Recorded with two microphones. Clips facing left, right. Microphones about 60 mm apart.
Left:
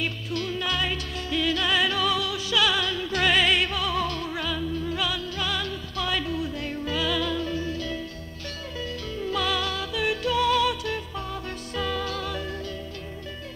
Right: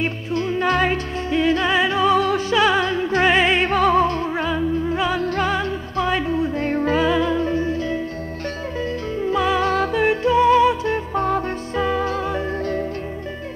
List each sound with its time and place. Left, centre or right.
0.0 s music: right
5.2 s music: right
11.1 s music: right
11.7 s music: right